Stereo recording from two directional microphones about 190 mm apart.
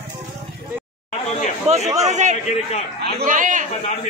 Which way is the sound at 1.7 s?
35° right (ahead or behind).